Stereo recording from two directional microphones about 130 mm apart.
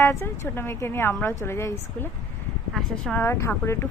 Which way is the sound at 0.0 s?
20° left (ahead or behind).